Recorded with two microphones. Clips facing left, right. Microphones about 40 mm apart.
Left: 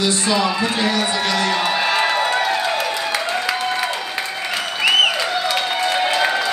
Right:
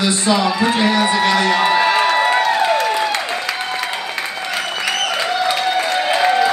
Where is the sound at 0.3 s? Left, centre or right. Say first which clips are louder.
Right 4 dB; centre.